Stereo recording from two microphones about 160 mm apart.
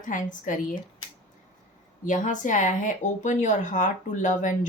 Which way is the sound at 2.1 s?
50° left (ahead or behind).